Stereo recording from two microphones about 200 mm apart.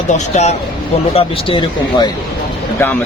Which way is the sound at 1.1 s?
25° left (ahead or behind).